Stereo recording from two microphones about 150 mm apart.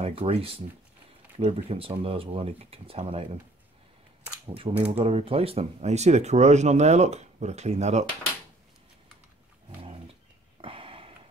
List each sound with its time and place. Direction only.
0.0 s speech: 40° right (ahead or behind)
4.5 s speech: 40° right (ahead or behind)
10.6 s a sound: 35° right (ahead or behind)